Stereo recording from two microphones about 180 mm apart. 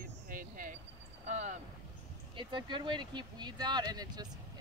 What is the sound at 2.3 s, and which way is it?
Speech, 25° right (ahead or behind).